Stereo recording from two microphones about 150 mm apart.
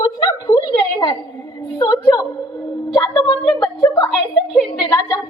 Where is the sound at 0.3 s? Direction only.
25° left (ahead or behind).